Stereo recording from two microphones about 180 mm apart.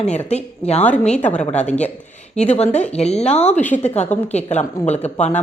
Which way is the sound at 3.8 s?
40° left (ahead or behind).